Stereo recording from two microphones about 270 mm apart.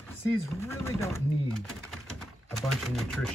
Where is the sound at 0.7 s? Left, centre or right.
Centre.